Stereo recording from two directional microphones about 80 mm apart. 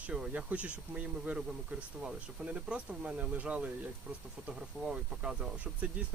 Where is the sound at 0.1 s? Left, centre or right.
Centre.